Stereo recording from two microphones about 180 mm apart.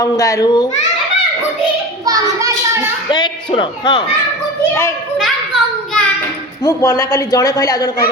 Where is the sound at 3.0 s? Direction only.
25° left (ahead or behind).